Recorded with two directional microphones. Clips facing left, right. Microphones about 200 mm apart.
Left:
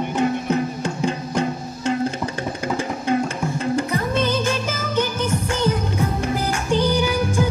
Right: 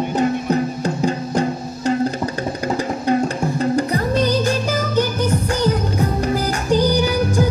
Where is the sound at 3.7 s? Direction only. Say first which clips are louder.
Right 3 dB; 40° right (ahead or behind).